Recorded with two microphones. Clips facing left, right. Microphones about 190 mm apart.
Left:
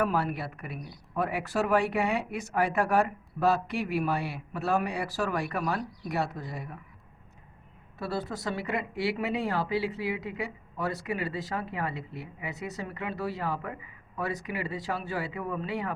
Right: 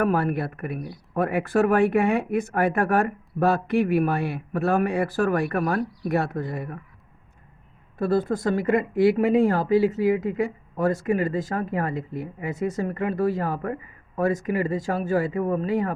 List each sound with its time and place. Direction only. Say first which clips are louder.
0.0 s speech: right 6 dB; 55° right (ahead or behind)
7.9 s speech: right 11 dB; 50° right (ahead or behind)